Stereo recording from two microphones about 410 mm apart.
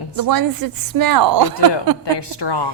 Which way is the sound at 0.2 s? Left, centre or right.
Right.